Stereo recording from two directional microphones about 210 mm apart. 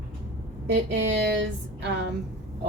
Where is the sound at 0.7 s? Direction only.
55° right (ahead or behind).